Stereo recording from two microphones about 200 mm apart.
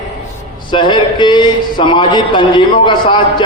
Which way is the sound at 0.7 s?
25° left (ahead or behind).